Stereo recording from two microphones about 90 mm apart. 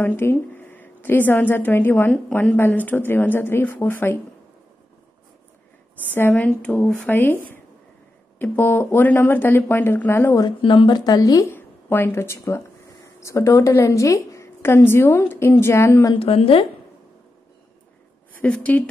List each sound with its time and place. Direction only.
0.0 s a woman's voice: 25° left (ahead or behind)
6.1 s speech: 20° left (ahead or behind)
10.6 s speech: 65° left (ahead or behind); by 11.4 s 45° left (ahead or behind)
11.4 s speech: 25° left (ahead or behind)
16.2 s a woman's voice: 90° left
18.3 s a woman's voice: 15° left (ahead or behind)